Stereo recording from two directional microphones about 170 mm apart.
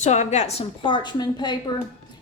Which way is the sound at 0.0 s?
40° left (ahead or behind).